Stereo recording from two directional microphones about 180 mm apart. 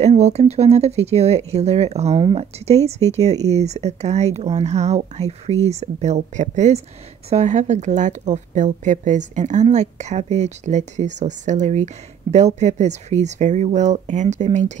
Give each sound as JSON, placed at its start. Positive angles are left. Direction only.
{"t": 0.0, "sound": "a woman's voice", "side_deg": -35}